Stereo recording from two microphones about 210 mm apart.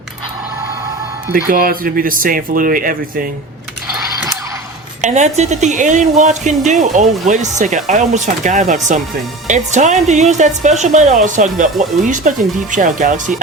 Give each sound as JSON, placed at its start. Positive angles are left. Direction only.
{"t": 1.3, "sound": "speech", "side_deg": -45}
{"t": 5.0, "sound": "speech", "side_deg": -35}